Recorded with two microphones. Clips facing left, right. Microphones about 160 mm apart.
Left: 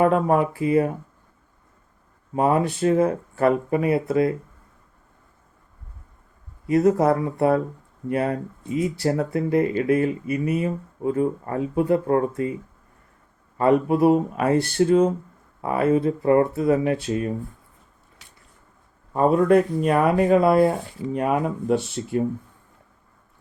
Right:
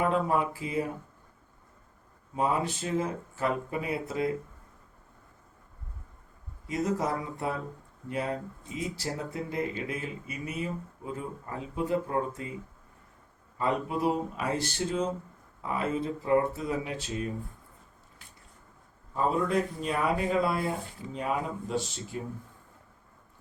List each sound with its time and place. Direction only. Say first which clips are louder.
0.0 s speech: left 8 dB; 60° left (ahead or behind)
2.3 s speech: left 8 dB; 60° left (ahead or behind)
6.7 s speech: left 12 dB; 65° left (ahead or behind)
13.6 s speech: left 11 dB; 60° left (ahead or behind)
18.2 s a sound: left 2 dB; 85° left
19.1 s speech: left 10 dB; 60° left (ahead or behind)